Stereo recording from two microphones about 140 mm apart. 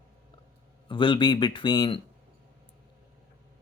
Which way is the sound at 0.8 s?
35° left (ahead or behind).